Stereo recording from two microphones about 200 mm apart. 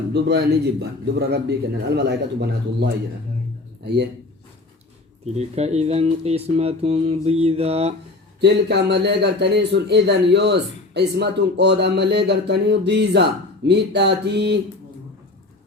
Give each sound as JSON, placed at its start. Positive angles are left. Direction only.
{"t": 0.1, "sound": "a man's voice", "side_deg": -55}
{"t": 5.2, "sound": "speech", "side_deg": -35}
{"t": 8.4, "sound": "a man's voice", "side_deg": -55}